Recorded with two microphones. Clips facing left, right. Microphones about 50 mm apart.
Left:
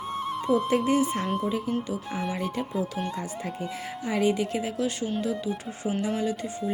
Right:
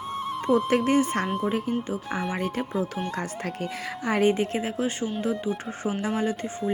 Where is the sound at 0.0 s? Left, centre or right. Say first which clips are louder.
Even; centre.